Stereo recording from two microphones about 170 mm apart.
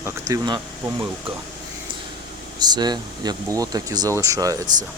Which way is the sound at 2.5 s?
25° right (ahead or behind).